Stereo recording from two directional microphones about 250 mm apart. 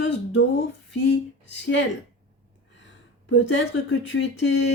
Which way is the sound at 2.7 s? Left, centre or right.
Left.